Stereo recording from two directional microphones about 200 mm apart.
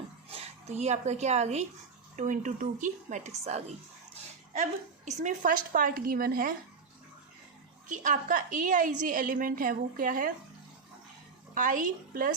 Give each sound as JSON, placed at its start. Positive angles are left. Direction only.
{"t": 0.3, "sound": "a woman's voice", "side_deg": -30}
{"t": 7.9, "sound": "a woman's voice", "side_deg": -40}
{"t": 11.5, "sound": "a woman's voice", "side_deg": -40}